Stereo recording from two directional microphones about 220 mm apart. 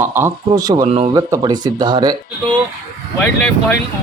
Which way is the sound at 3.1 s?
10° left (ahead or behind).